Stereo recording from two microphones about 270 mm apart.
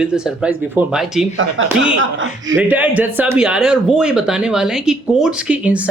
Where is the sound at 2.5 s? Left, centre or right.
Centre.